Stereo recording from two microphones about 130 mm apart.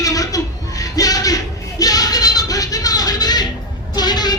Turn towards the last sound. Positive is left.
turn(degrees=30)  # may be behind; listen again after turning